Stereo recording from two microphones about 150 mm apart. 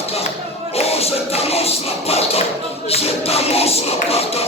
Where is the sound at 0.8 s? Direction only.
40° left (ahead or behind).